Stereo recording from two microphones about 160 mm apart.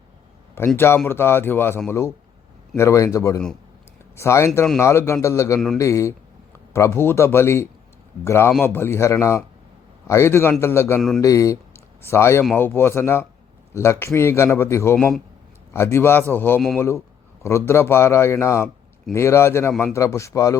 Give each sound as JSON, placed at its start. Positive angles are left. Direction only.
{"t": 0.8, "sound": "a man's voice", "side_deg": 15}